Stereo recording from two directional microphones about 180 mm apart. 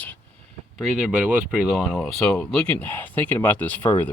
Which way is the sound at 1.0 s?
5° right (ahead or behind).